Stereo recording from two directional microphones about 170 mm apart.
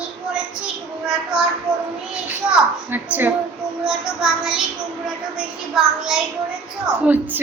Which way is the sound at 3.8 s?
5° right (ahead or behind).